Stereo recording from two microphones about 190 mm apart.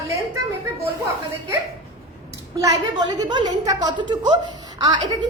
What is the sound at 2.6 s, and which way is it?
A woman's voice, 20° right (ahead or behind).